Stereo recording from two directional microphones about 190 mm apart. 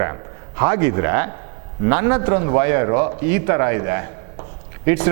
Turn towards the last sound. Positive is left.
turn(degrees=-15)  # may be behind; listen again after turning